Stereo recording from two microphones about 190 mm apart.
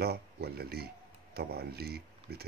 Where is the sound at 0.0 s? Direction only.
55° right (ahead or behind).